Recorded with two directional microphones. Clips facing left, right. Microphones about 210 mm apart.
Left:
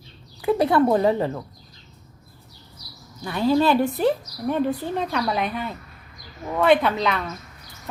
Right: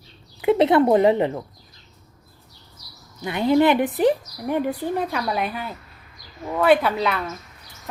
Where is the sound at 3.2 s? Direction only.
20° right (ahead or behind).